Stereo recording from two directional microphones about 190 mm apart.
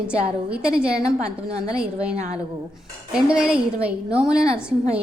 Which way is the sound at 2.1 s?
35° right (ahead or behind).